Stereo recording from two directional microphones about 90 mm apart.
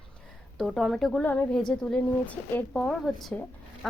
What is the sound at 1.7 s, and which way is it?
A woman's voice, 10° left (ahead or behind).